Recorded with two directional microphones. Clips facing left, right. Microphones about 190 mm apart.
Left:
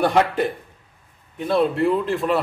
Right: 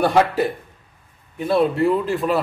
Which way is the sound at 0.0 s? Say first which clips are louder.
Right 1 dB; centre (ahead or behind).